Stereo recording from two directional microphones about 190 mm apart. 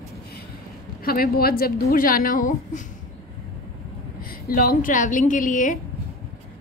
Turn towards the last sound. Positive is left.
turn(degrees=45)  # may be behind; listen again after turning